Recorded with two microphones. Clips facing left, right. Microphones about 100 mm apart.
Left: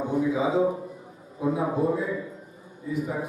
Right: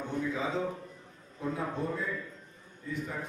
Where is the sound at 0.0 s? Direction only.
10° left (ahead or behind).